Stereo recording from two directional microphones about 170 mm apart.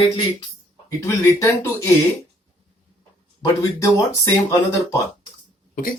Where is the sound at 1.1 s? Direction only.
15° left (ahead or behind).